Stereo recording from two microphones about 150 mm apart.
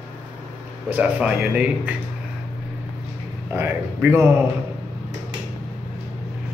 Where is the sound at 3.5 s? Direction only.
15° right (ahead or behind).